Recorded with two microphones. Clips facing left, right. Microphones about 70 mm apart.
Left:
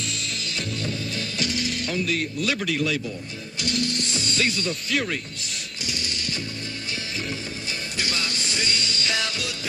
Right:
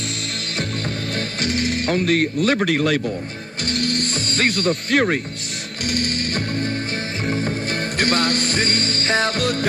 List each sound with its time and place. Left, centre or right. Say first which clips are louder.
1.4 s speech: right 6 dB; right
3.7 s music: right 5 dB; right
8.0 s music: right 10 dB; right